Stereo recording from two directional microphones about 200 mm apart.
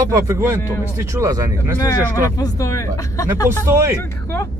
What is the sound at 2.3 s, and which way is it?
Speech, 15° left (ahead or behind).